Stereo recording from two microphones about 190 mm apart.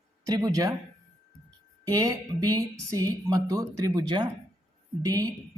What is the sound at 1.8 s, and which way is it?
Speech, 20° right (ahead or behind).